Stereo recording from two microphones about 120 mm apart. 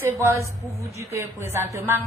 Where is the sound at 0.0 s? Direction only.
20° right (ahead or behind).